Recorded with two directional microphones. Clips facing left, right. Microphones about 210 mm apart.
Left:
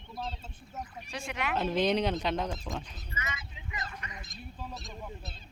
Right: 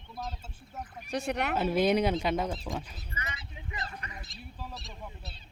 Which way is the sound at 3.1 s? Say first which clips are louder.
Left 2 dB; 35° right (ahead or behind).